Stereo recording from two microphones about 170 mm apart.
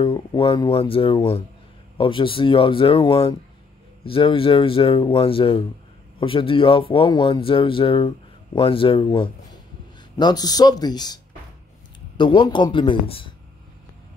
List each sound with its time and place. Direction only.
0.0 s a man's voice: 30° left (ahead or behind)
12.2 s a man's voice: 30° left (ahead or behind)